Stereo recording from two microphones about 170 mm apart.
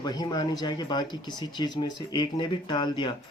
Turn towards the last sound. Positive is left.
turn(degrees=25)  # may be behind; listen again after turning